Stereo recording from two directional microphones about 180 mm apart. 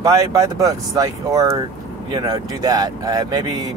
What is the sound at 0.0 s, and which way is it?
Speech, 20° right (ahead or behind).